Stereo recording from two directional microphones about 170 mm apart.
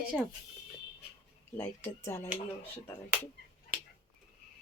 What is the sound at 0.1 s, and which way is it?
Speech, centre (ahead or behind).